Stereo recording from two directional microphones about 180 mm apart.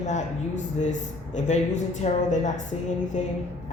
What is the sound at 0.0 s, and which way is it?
Speech, 40° left (ahead or behind).